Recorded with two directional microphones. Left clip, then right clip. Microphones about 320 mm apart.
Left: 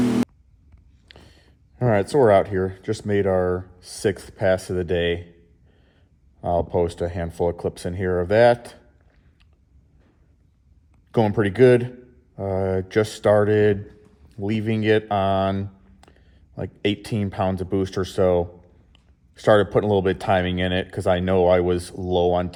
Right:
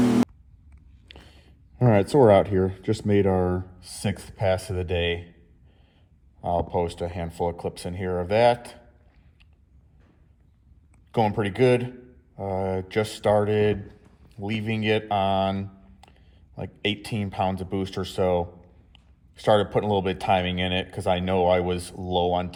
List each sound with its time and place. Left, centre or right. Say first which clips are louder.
0.0 s busy signal: even; centre
1.1 s speech: even; left
6.4 s speech: left 4 dB; left
11.1 s speech: left 3 dB; left